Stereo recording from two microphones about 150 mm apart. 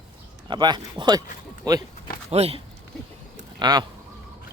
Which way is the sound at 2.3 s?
45° right (ahead or behind).